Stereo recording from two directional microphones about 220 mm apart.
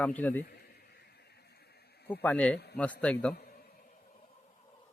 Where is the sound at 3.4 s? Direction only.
40° left (ahead or behind).